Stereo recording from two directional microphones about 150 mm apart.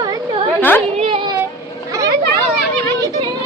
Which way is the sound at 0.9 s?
40° right (ahead or behind).